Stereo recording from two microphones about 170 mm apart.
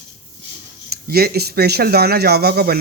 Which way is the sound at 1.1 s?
65° right (ahead or behind).